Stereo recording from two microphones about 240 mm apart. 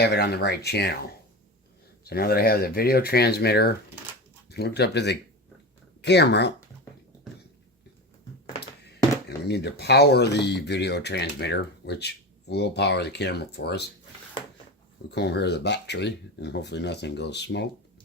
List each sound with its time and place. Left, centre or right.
0.0 s speech: left
2.0 s speech: left
8.8 s speech: left
15.1 s speech: left